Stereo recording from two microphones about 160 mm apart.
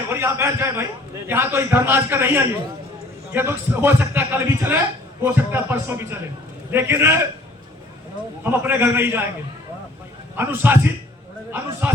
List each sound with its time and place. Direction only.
0.1 s a man's voice: 15° right (ahead or behind)
8.4 s a man's voice: 15° right (ahead or behind)
10.3 s a man's voice: 15° right (ahead or behind)